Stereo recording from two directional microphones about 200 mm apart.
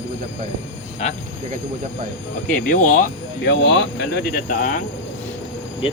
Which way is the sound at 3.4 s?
60° left (ahead or behind).